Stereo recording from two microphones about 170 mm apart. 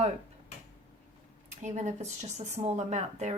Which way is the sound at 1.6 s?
45° right (ahead or behind).